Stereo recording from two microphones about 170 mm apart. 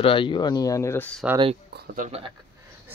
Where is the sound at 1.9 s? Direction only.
40° right (ahead or behind).